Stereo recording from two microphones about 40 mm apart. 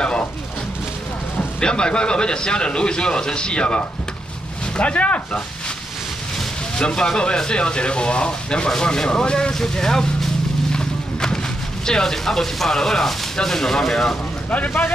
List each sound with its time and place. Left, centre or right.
0.0 s a sound: left
1.6 s a man's voice: left
6.8 s speech: left